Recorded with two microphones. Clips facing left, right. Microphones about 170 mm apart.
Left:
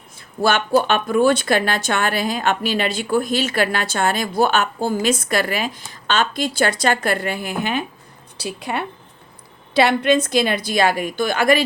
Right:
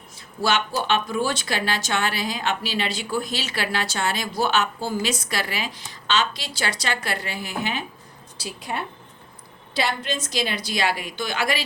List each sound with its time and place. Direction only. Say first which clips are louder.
0.4 s a woman's voice: left 6 dB; 55° left (ahead or behind)
8.4 s a woman's voice: left 5 dB; 65° left (ahead or behind); by 11.6 s 50° left (ahead or behind)